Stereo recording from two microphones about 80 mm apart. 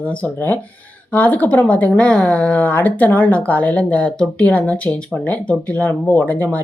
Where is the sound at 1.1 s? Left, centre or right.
Left.